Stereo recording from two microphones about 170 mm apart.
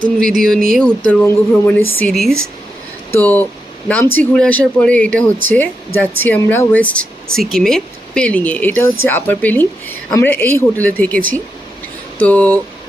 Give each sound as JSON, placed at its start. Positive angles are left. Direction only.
{"t": 0.0, "sound": "speech", "side_deg": -55}
{"t": 0.8, "sound": "speech", "side_deg": 5}
{"t": 12.2, "sound": "speech", "side_deg": 10}